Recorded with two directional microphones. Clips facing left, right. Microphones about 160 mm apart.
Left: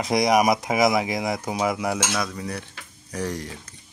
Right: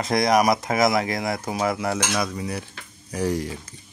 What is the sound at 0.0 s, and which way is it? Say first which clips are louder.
Speech: even; 15° left (ahead or behind).